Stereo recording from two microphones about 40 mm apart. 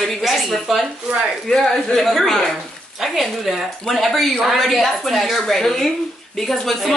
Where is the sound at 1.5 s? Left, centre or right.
Centre.